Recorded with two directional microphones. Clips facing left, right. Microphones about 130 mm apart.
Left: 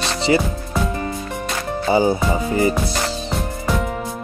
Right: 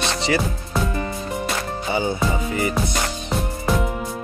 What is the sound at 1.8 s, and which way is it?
Music, 30° left (ahead or behind).